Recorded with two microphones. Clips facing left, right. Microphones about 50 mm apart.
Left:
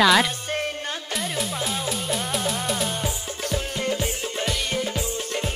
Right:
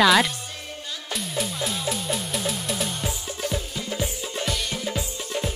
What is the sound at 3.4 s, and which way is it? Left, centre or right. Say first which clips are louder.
Music: left 3 dB; left.